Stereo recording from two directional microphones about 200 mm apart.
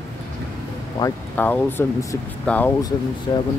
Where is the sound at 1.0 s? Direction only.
10° left (ahead or behind).